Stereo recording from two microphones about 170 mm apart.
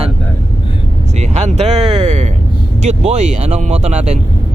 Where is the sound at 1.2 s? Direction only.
40° right (ahead or behind).